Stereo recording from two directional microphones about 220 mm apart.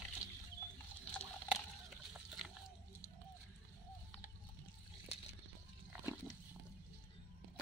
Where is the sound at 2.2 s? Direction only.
Centre (ahead or behind).